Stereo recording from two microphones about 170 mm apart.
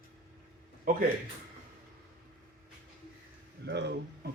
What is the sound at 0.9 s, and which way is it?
Speech, 55° right (ahead or behind).